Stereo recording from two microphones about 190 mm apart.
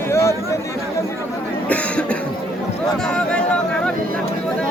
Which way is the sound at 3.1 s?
5° left (ahead or behind).